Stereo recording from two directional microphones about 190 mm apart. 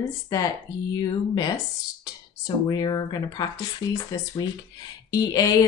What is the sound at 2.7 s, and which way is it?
Speech, 20° left (ahead or behind).